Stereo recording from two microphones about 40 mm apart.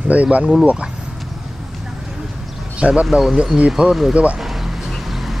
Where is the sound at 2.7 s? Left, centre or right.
Right.